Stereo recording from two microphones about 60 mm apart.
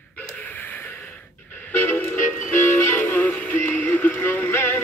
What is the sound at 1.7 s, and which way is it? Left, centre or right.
Music, left.